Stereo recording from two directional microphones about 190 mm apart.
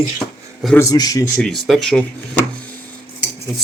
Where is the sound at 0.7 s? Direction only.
20° left (ahead or behind).